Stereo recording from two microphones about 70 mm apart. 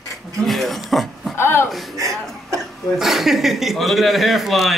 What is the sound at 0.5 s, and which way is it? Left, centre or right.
Speech, centre.